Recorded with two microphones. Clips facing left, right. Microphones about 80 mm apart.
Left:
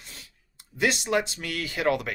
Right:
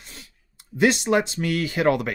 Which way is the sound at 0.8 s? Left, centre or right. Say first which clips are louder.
Right 5 dB; right.